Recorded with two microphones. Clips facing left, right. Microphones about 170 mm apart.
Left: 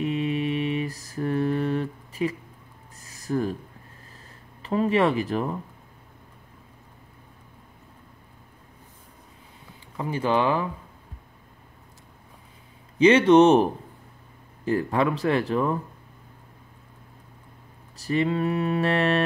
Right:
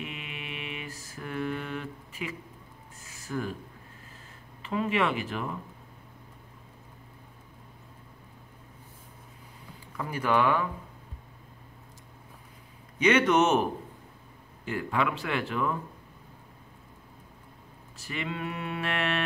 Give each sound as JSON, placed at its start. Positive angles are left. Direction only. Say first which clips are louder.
{"t": 0.0, "sound": "mantra", "louder": "left 15 dB", "side_deg": 35}
{"t": 3.0, "sound": "a sound", "louder": "left 7 dB", "side_deg": 40}
{"t": 4.6, "sound": "speech", "louder": "left 6 dB", "side_deg": 35}
{"t": 9.9, "sound": "speech", "louder": "left 3 dB", "side_deg": 25}
{"t": 13.0, "sound": "speech", "louder": "left 8 dB", "side_deg": 30}
{"t": 17.9, "sound": "speech", "louder": "left 11 dB", "side_deg": 35}